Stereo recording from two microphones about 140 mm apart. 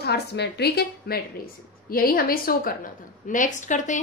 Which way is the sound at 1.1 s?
90° left.